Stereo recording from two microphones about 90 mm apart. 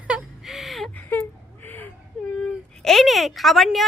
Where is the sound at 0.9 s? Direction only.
15° left (ahead or behind).